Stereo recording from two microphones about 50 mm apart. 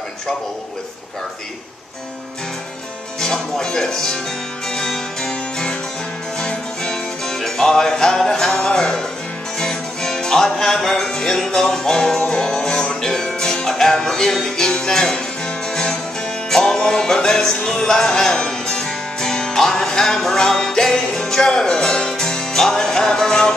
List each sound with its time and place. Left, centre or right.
3.2 s speech: centre
4.7 s music: centre